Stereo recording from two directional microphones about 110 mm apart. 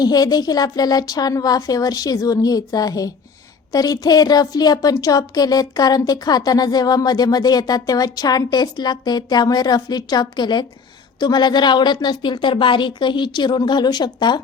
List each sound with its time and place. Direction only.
0.0 s a woman's voice: 35° left (ahead or behind)